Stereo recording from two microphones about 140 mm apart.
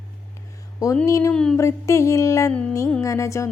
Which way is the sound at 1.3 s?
5° left (ahead or behind).